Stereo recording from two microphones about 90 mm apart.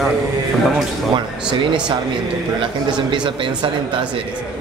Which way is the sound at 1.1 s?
65° right (ahead or behind).